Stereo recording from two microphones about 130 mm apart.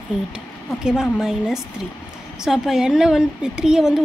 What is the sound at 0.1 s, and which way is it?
Speech, 5° right (ahead or behind).